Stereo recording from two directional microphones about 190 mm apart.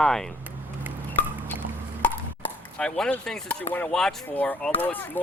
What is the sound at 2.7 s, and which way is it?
Speech, 5° left (ahead or behind).